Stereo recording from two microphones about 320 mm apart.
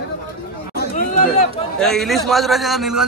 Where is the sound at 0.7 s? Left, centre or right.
Left.